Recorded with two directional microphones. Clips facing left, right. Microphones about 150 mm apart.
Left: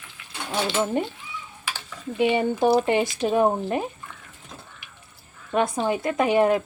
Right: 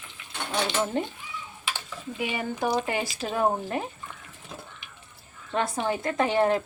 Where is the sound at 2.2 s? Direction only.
25° left (ahead or behind).